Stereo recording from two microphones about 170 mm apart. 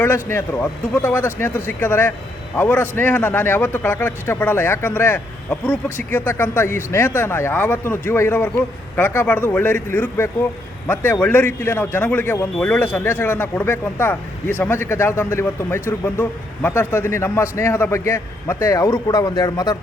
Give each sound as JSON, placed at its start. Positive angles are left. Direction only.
{"t": 0.0, "sound": "a man's voice", "side_deg": 10}